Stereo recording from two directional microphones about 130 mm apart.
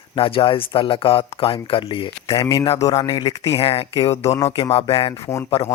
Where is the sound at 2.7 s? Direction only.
30° left (ahead or behind).